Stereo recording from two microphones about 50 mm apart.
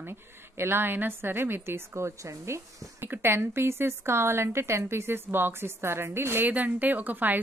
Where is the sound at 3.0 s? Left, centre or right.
Right.